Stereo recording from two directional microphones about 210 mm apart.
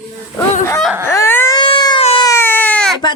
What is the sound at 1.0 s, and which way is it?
Baby cry, 15° left (ahead or behind).